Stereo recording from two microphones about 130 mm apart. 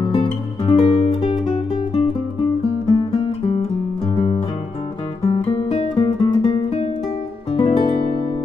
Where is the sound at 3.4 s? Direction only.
50° left (ahead or behind).